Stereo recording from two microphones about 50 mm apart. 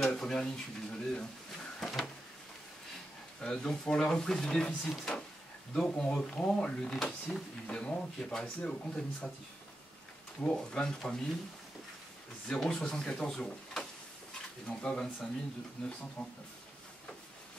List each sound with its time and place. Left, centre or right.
0.0 s speech: centre
1.8 s a sound: centre
3.3 s speech: centre
7.6 s speech: left
8.2 s speech: centre
8.5 s speech: left
10.4 s speech: centre
12.4 s speech: centre